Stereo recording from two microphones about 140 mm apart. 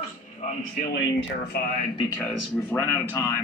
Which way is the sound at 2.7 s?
10° left (ahead or behind).